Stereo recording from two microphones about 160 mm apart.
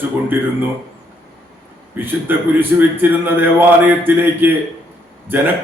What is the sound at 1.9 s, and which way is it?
A man's voice, 10° right (ahead or behind).